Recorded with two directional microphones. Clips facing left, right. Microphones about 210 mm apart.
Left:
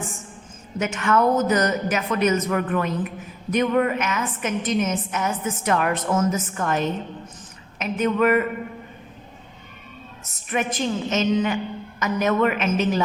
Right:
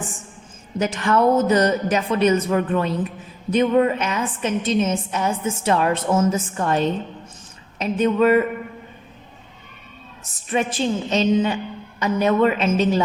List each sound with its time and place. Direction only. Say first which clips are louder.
0.8 s a woman's voice: right 2 dB; 35° right (ahead or behind)
10.5 s a woman's voice: right 3 dB; 30° right (ahead or behind)